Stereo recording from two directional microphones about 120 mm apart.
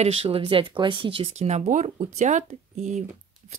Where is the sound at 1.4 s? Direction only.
80° right.